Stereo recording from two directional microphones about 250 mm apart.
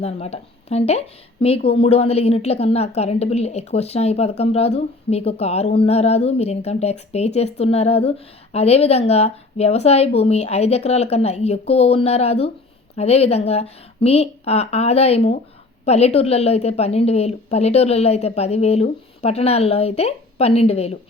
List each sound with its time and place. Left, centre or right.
0.0 s a woman's voice: left